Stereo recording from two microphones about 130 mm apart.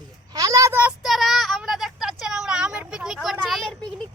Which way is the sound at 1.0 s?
Centre (ahead or behind).